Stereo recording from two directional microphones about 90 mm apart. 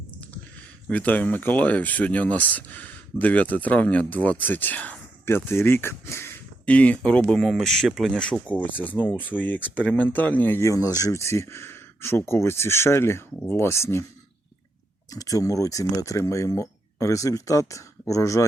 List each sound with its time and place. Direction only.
0.9 s speech: 15° left (ahead or behind)
6.7 s speech: 15° left (ahead or behind)
10.6 s speech: 35° left (ahead or behind)
15.1 s speech: 40° left (ahead or behind)